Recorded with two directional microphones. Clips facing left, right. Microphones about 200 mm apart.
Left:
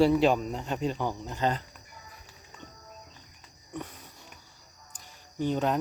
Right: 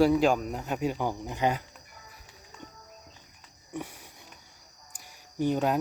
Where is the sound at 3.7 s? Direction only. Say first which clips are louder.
Right 1 dB; 10° right (ahead or behind).